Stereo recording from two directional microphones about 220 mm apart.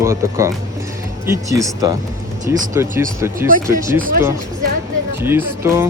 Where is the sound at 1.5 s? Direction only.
15° right (ahead or behind).